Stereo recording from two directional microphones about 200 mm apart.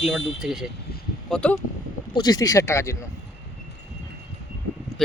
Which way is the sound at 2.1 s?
20° left (ahead or behind).